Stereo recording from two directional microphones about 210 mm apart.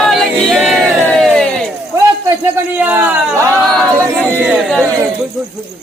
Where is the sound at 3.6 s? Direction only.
Centre (ahead or behind).